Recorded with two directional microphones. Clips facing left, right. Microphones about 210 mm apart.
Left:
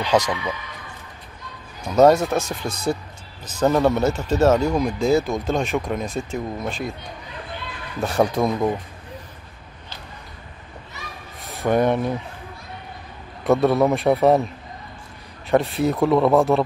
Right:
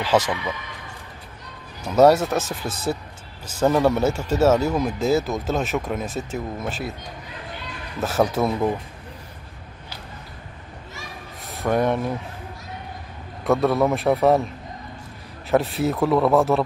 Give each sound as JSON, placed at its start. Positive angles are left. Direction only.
{"t": 0.0, "sound": "speech", "side_deg": -5}
{"t": 1.8, "sound": "speech", "side_deg": -5}
{"t": 8.0, "sound": "speech", "side_deg": -5}
{"t": 11.4, "sound": "speech", "side_deg": 0}
{"t": 13.4, "sound": "speech", "side_deg": 0}
{"t": 15.5, "sound": "speech", "side_deg": 0}